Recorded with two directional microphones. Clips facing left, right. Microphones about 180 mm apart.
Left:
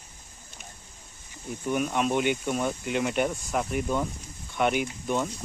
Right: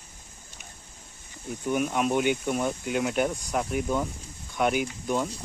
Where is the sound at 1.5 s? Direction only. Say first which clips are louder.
Right 1 dB; centre (ahead or behind).